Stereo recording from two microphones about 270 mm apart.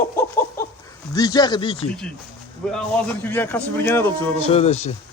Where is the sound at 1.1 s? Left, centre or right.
Centre.